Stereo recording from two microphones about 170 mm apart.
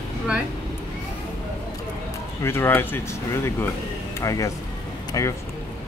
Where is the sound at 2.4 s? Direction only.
15° left (ahead or behind).